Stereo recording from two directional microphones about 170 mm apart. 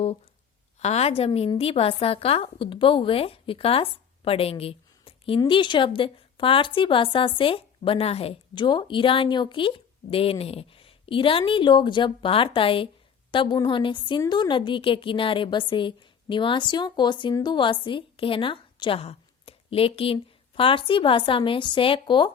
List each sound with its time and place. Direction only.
0.8 s a woman's voice: 40° left (ahead or behind)